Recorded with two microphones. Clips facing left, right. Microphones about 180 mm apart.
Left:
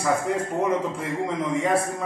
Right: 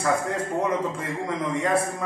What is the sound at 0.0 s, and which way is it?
Speech, 10° left (ahead or behind).